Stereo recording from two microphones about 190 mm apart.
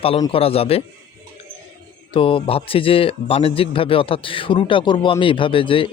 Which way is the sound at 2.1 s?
25° left (ahead or behind).